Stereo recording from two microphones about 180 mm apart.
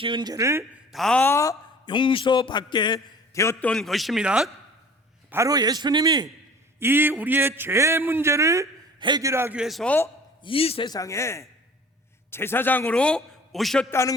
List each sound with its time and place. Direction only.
0.0 s a man's voice: 25° right (ahead or behind)
0.9 s speech: 5° left (ahead or behind)
1.9 s a man's voice: 25° left (ahead or behind)
3.7 s a man's voice: centre (ahead or behind)
5.3 s a man's voice: 20° right (ahead or behind)
6.7 s a man's voice: 10° right (ahead or behind); by 10.1 s 10° left (ahead or behind)
10.4 s a man's voice: 30° left (ahead or behind); by 13.8 s centre (ahead or behind)